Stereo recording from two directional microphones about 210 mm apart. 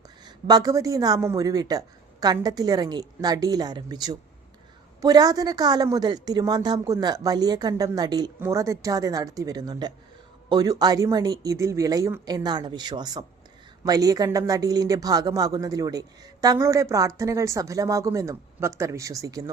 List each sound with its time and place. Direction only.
0.3 s a woman's voice: 20° right (ahead or behind)